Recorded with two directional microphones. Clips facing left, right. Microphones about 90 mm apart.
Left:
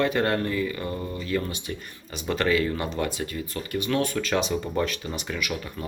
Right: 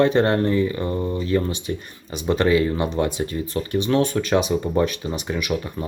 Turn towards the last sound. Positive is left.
turn(degrees=-20)  # may be behind; listen again after turning